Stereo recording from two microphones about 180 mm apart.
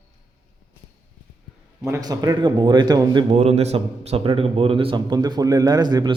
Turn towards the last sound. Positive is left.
turn(degrees=-25)  # may be behind; listen again after turning